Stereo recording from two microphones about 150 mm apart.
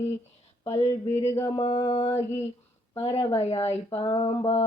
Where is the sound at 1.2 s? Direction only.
15° left (ahead or behind).